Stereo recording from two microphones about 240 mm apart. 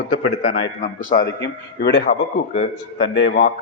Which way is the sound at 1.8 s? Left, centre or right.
Left.